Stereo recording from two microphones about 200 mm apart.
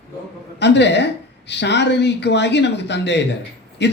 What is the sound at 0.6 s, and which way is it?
A man's voice, 60° left (ahead or behind).